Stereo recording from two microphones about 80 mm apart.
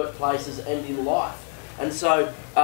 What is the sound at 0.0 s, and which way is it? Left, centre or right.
A man's voice, centre.